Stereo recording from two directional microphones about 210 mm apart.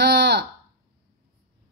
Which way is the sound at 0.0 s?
55° right (ahead or behind).